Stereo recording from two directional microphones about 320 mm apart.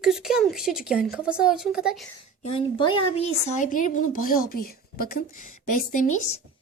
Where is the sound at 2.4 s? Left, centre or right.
Centre.